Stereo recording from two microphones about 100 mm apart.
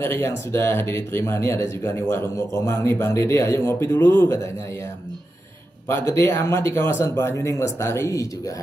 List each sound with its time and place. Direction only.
0.0 s speech: 25° left (ahead or behind)
5.9 s speech: 25° left (ahead or behind)